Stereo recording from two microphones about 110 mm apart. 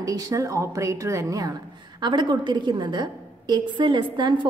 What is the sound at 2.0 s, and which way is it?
A woman's voice, 45° right (ahead or behind).